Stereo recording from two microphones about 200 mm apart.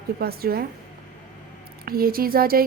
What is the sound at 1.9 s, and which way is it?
Speech, 50° right (ahead or behind).